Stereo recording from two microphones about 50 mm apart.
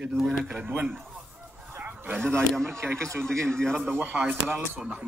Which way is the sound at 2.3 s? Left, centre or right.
Centre.